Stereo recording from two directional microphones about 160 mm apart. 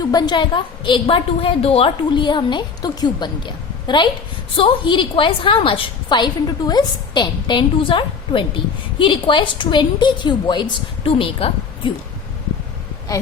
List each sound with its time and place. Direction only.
0.0 s a woman's voice: 25° left (ahead or behind)